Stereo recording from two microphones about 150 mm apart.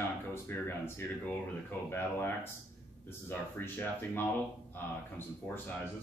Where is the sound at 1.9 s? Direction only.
15° left (ahead or behind).